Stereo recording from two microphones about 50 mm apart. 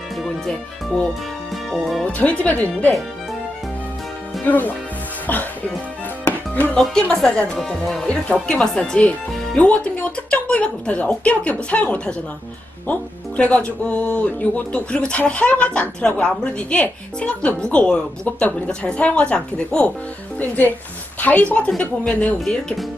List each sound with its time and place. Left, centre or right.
0.2 s speech: centre
2.0 s speech: left
4.4 s speech: left
6.2 s music: left
6.9 s a woman's voice: centre
8.0 s speech: left
9.6 s speech: left
16.0 s a woman's voice: centre
17.2 s speech: centre
21.2 s speech: left
22.4 s speech: centre